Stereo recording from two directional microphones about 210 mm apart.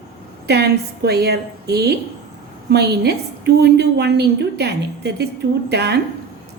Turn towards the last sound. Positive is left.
turn(degrees=-50)  # may be behind; listen again after turning